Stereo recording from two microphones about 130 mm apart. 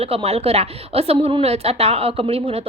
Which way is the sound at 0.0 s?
50° right (ahead or behind).